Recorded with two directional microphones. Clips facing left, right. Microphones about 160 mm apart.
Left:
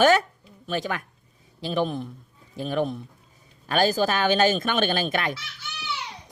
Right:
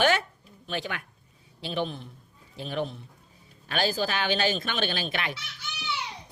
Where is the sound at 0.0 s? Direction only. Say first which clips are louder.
Left 6 dB; 40° left (ahead or behind).